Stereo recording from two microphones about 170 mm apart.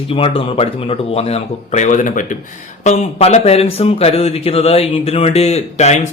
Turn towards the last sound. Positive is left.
turn(degrees=40)  # may be behind; listen again after turning